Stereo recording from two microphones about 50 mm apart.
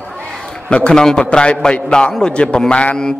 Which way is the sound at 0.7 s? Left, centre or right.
Centre.